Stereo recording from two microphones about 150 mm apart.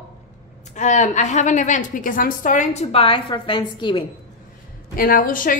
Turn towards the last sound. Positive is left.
turn(degrees=65)  # may be behind; listen again after turning